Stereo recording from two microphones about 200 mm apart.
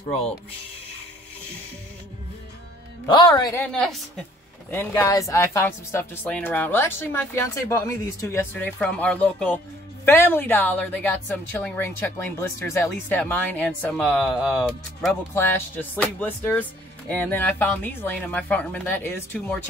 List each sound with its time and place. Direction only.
3.1 s a man's voice: 20° left (ahead or behind)
4.6 s a woman's voice: 10° left (ahead or behind)